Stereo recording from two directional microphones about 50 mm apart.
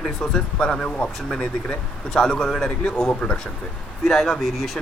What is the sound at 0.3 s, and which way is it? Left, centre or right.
Speech, centre.